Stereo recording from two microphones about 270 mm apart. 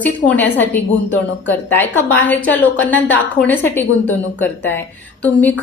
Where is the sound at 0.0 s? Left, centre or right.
Centre.